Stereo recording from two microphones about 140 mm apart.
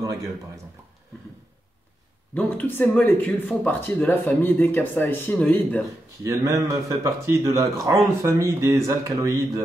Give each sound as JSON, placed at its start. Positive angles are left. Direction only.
{"t": 0.0, "sound": "a sound", "side_deg": -25}
{"t": 2.3, "sound": "speech", "side_deg": 15}
{"t": 6.2, "sound": "speech", "side_deg": -20}